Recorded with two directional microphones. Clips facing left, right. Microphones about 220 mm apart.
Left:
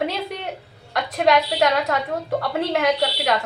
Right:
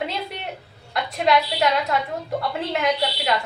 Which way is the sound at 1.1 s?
50° left (ahead or behind).